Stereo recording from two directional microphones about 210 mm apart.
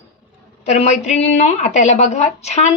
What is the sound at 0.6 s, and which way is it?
Speech, 30° left (ahead or behind).